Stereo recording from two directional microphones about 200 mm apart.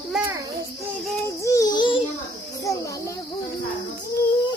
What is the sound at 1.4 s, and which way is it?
Music, 15° left (ahead or behind).